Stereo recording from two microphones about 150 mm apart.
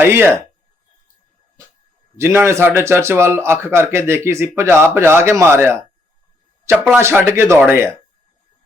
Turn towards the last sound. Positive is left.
turn(degrees=-15)  # may be behind; listen again after turning